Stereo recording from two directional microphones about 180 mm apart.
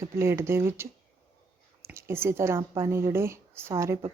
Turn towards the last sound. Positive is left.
turn(degrees=-20)  # may be behind; listen again after turning